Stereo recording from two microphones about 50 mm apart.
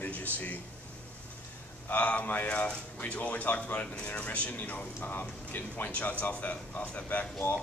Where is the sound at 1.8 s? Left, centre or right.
Left.